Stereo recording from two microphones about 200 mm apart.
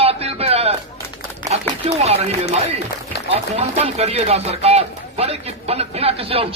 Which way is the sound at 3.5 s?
30° right (ahead or behind).